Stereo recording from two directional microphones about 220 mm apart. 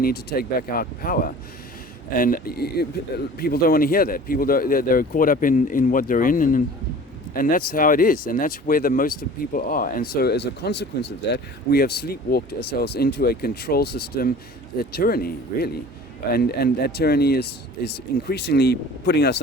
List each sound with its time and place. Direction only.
0.0 s speech: 45° left (ahead or behind)